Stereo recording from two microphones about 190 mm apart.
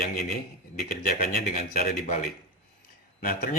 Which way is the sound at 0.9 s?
45° left (ahead or behind).